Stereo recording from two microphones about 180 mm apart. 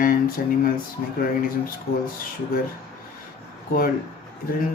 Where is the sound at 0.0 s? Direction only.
50° left (ahead or behind).